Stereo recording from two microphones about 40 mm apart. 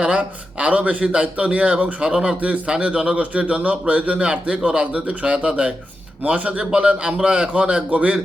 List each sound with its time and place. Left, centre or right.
0.2 s a man's voice: right
7.9 s speech: right